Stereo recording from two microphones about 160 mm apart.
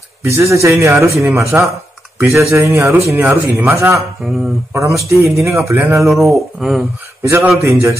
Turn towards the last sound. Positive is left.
turn(degrees=-15)  # may be behind; listen again after turning